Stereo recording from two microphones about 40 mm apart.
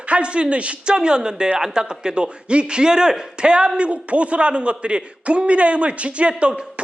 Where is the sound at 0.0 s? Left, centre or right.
Right.